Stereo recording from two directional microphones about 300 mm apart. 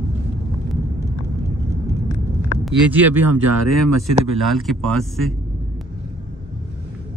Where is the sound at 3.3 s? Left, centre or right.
Right.